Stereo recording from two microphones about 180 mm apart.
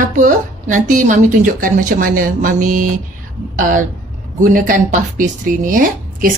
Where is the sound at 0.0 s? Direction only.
45° right (ahead or behind).